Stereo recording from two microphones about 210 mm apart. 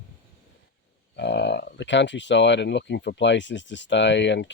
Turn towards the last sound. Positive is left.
turn(degrees=60)  # may be behind; listen again after turning